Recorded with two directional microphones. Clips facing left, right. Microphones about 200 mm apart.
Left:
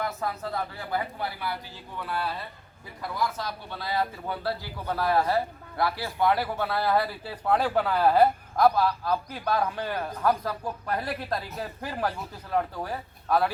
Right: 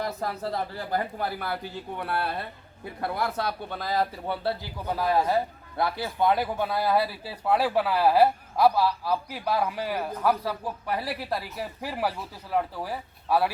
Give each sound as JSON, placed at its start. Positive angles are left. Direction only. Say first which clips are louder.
{"t": 0.0, "sound": "speech", "louder": "right 1 dB", "side_deg": -35}
{"t": 3.8, "sound": "speech", "louder": "right 2 dB", "side_deg": -40}
{"t": 4.9, "sound": "a man's voice", "louder": "right 1 dB", "side_deg": -15}